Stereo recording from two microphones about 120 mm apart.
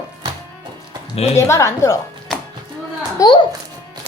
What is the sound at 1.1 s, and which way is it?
Speech, 60° left (ahead or behind).